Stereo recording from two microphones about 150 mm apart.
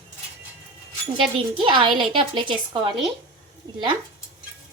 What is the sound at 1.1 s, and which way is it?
A woman's voice, 35° right (ahead or behind).